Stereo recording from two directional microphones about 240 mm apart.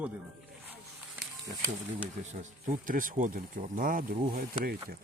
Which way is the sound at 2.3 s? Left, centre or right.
Right.